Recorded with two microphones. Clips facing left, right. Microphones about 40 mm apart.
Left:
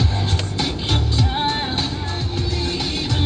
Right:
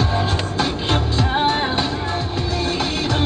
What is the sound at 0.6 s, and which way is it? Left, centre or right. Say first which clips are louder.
Music: right 3 dB; right.